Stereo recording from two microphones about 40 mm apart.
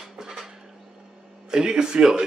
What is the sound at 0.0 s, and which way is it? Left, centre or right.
Dishes, centre.